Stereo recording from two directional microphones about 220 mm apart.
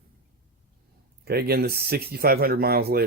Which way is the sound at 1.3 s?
45° right (ahead or behind).